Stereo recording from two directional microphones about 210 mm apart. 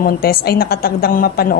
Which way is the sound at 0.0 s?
45° left (ahead or behind).